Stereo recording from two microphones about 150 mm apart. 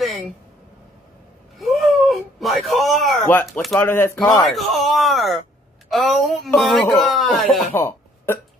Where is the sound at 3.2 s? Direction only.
15° left (ahead or behind).